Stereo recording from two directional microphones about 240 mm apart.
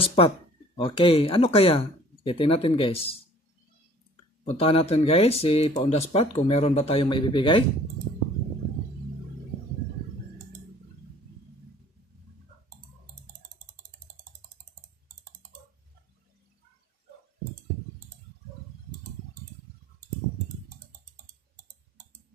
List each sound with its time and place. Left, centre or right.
0.0 s speech: left
4.5 s speech: left